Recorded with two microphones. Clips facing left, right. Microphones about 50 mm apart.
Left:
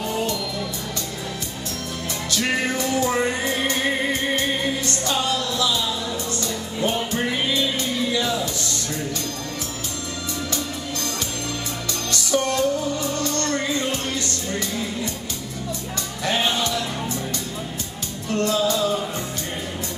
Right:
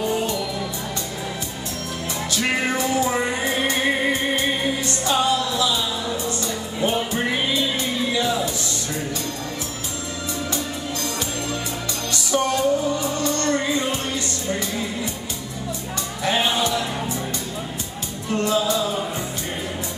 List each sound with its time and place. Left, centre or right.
2.6 s music: centre
12.1 s music: centre
16.3 s music: centre
18.3 s music: centre